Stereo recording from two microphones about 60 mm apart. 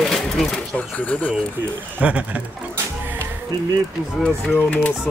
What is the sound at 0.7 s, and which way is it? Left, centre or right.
Chuckle, left.